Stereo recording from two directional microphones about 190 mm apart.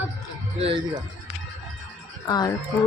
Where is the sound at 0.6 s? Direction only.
25° right (ahead or behind).